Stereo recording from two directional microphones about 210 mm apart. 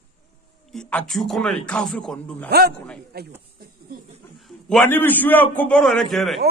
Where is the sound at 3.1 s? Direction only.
50° right (ahead or behind).